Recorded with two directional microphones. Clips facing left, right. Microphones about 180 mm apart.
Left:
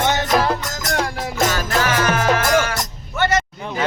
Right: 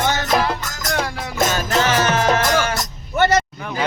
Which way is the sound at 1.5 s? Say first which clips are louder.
Right 1 dB; 20° right (ahead or behind).